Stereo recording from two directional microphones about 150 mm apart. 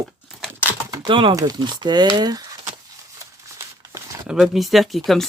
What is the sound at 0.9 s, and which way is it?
Speech, 30° right (ahead or behind).